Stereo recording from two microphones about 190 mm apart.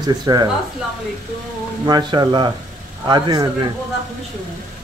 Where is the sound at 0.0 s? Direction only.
20° right (ahead or behind).